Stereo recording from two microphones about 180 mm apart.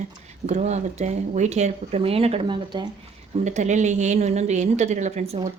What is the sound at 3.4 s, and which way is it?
A woman's voice, 40° right (ahead or behind).